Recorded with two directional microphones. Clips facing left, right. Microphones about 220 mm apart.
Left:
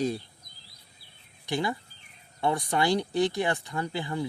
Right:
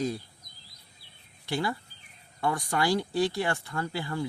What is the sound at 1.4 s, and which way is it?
Speech, 20° left (ahead or behind).